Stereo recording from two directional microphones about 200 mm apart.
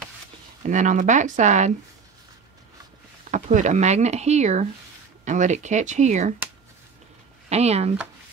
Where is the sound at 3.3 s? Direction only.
40° right (ahead or behind).